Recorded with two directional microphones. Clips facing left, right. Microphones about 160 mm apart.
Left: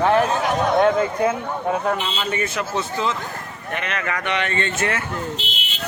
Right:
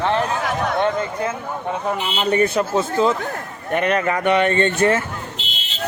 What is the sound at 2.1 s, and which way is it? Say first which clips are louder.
Speech: right 7 dB; 35° right (ahead or behind).